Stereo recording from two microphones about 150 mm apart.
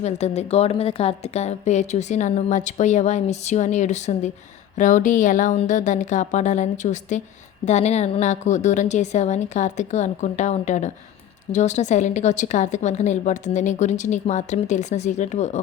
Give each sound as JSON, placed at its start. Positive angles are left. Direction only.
{"t": 0.0, "sound": "a woman's voice", "side_deg": 45}